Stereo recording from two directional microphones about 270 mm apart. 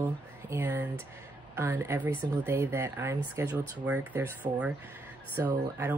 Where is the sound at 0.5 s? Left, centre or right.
Centre.